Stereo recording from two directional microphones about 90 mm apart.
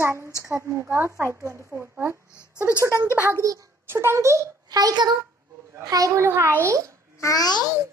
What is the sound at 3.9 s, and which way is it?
Speech, 30° right (ahead or behind).